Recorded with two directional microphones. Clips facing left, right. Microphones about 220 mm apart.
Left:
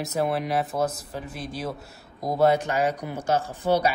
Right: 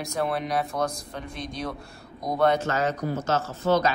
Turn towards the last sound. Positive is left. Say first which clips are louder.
# even
turn(degrees=10)  # may be behind; listen again after turning